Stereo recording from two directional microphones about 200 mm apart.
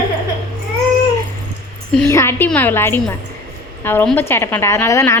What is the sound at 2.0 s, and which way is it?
A woman's voice, 15° left (ahead or behind).